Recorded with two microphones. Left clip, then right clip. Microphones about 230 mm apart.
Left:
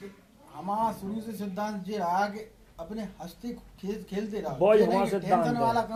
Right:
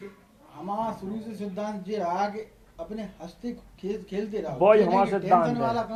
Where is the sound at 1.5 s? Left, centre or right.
Left.